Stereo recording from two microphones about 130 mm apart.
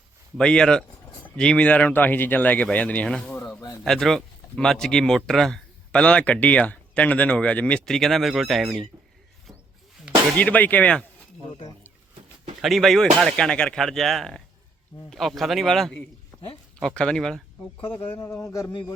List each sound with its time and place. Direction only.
0.3 s speech: 5° left (ahead or behind)
10.3 s speech: 10° left (ahead or behind)
12.6 s speech: centre (ahead or behind)
18.2 s speech: 25° left (ahead or behind)